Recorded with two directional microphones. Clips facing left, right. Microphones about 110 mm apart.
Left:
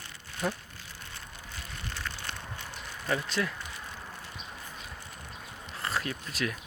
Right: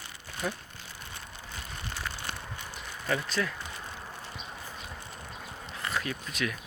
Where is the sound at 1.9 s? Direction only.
10° right (ahead or behind).